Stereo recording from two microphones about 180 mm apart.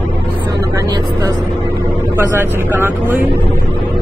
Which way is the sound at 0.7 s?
20° right (ahead or behind).